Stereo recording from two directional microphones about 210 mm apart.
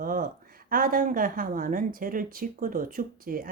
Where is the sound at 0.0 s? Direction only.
40° right (ahead or behind).